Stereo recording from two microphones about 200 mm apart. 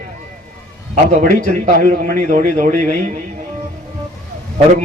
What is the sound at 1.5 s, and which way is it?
A man's voice, 40° right (ahead or behind).